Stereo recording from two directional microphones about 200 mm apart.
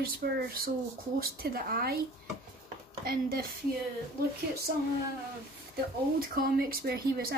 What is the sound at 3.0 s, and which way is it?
Speech, 50° right (ahead or behind).